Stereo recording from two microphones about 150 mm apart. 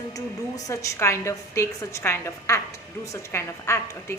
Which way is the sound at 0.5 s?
20° left (ahead or behind).